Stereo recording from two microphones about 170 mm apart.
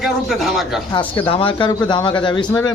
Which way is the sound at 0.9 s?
30° left (ahead or behind).